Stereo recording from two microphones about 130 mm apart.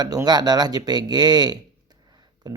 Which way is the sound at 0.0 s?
30° right (ahead or behind).